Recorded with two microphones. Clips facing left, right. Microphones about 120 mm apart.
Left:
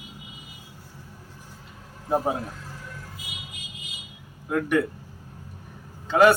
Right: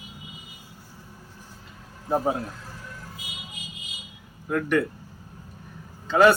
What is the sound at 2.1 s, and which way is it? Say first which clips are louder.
Speech: even; 5° left (ahead or behind).